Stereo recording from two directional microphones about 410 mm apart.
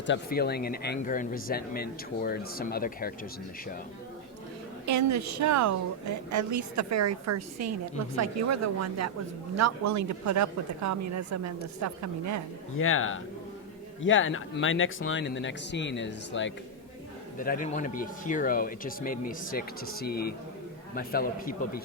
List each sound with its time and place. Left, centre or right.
0.0 s speech: left
4.9 s a woman's voice: right
12.7 s speech: left